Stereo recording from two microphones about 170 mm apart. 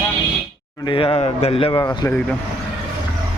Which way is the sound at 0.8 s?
30° left (ahead or behind).